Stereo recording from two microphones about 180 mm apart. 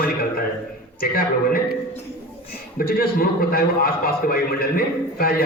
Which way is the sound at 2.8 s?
55° left (ahead or behind).